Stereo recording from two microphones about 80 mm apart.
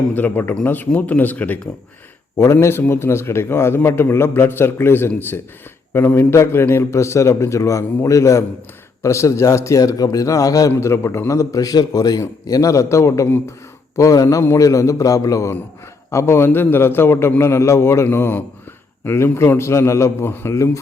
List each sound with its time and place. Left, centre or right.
0.1 s speech: left
2.4 s a man's voice: left
10.7 s a man's voice: left
16.1 s a man's voice: left